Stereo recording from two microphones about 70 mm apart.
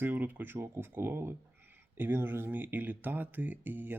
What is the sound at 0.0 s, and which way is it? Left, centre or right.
Speech, right.